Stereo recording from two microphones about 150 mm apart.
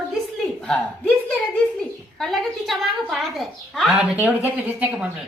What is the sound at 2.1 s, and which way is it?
Speech, centre (ahead or behind).